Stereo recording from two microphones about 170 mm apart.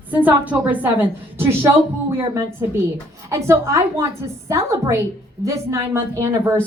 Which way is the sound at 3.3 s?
15° right (ahead or behind).